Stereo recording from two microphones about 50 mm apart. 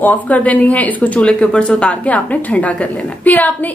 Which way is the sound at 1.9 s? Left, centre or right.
Left.